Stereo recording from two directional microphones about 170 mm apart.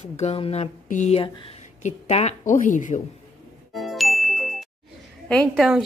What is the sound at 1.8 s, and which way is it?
A woman's voice, 45° left (ahead or behind).